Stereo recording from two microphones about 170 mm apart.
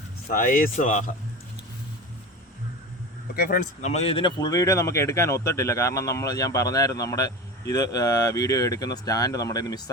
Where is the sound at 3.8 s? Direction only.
40° left (ahead or behind).